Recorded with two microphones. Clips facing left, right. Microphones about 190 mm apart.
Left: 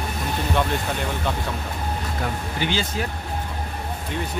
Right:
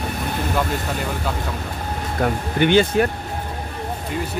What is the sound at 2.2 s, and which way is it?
Speech, 60° right (ahead or behind).